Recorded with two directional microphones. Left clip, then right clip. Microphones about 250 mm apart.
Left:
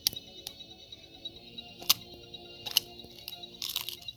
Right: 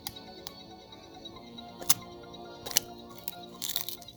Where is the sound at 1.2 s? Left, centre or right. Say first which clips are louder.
Left 3 dB; right.